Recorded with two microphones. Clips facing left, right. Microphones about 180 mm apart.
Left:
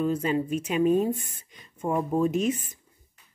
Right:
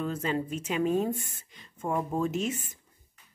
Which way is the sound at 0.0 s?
10° left (ahead or behind).